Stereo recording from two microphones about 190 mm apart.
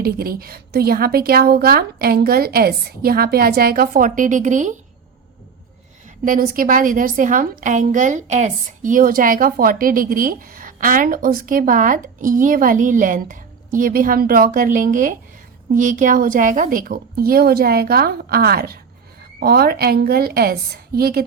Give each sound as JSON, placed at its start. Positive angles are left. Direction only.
{"t": 0.0, "sound": "a woman's voice", "side_deg": -50}
{"t": 6.2, "sound": "a woman's voice", "side_deg": -45}